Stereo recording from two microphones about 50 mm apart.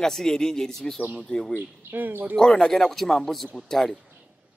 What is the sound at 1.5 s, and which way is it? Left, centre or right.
Speech, right.